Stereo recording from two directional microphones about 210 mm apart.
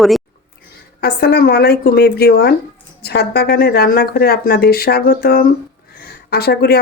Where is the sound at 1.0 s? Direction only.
50° left (ahead or behind).